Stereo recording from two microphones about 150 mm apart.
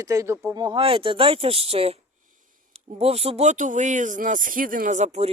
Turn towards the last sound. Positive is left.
turn(degrees=-60)  # may be behind; listen again after turning